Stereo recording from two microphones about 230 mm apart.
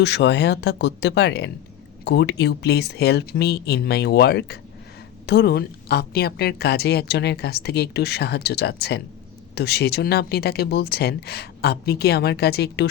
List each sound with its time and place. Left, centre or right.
0.0 s a woman's voice: left